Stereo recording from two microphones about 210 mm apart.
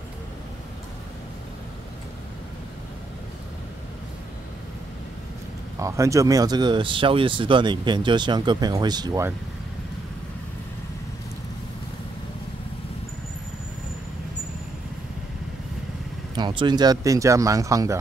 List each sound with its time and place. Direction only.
5.8 s speech: 15° right (ahead or behind)
16.3 s speech: 20° right (ahead or behind)